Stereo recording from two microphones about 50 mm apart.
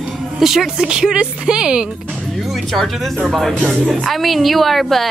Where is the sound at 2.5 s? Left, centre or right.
Centre.